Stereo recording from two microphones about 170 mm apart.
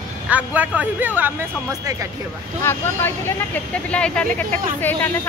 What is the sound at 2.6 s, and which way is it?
Speech, 10° left (ahead or behind).